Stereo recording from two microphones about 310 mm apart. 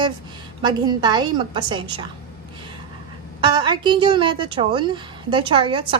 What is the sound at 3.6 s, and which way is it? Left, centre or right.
A woman's voice, centre.